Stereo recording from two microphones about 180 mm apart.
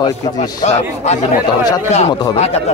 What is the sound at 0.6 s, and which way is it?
Speech, 40° left (ahead or behind).